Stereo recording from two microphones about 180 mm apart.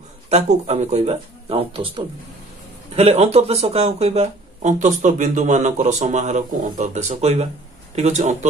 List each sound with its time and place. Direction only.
0.3 s speech: 40° right (ahead or behind)